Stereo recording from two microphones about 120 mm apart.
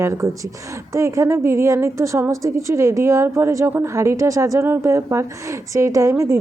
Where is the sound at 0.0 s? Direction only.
25° right (ahead or behind).